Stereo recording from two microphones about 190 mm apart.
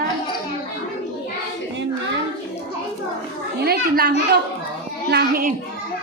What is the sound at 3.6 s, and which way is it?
A woman's voice, 55° right (ahead or behind).